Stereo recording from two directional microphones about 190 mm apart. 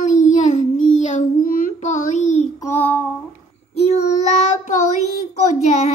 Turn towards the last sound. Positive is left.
turn(degrees=35)  # may be behind; listen again after turning